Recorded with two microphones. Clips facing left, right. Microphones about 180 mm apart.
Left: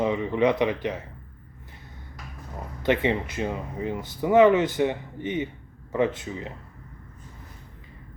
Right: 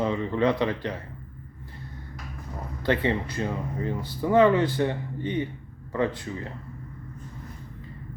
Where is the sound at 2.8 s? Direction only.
20° left (ahead or behind).